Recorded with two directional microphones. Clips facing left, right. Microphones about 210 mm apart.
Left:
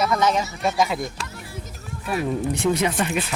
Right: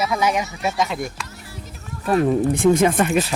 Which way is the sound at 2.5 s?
50° right (ahead or behind).